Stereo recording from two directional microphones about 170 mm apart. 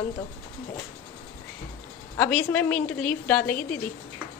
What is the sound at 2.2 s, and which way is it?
A woman's voice, 5° left (ahead or behind).